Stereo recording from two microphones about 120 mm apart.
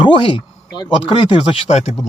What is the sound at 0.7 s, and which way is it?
Speech, 35° left (ahead or behind).